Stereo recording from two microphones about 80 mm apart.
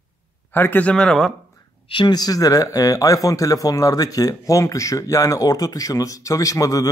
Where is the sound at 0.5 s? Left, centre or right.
Left.